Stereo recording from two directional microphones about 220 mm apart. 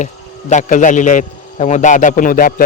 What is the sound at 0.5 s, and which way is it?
A man's voice, 35° left (ahead or behind).